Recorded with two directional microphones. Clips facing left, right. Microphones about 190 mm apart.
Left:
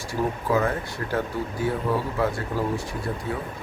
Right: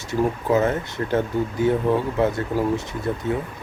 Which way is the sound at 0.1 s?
20° right (ahead or behind).